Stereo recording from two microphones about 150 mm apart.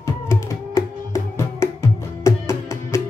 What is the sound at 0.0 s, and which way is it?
Music, 20° left (ahead or behind).